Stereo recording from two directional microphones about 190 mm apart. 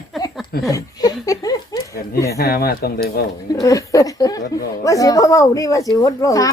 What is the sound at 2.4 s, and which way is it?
Speech, 50° left (ahead or behind).